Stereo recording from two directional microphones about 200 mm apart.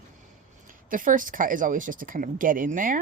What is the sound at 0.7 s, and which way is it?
Speech, 40° right (ahead or behind).